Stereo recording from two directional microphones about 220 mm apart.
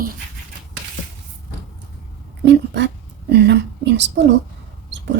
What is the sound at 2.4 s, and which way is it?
Speech, 50° right (ahead or behind).